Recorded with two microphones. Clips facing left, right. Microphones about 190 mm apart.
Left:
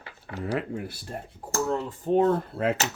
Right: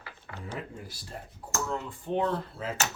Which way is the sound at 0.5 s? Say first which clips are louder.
Left 9 dB; 65° left (ahead or behind).